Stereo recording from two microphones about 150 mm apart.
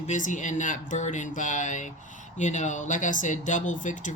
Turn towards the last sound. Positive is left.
turn(degrees=55)  # may be behind; listen again after turning